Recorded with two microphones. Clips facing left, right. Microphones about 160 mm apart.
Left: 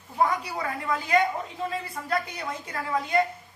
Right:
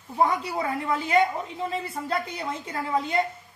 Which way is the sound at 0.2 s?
25° right (ahead or behind).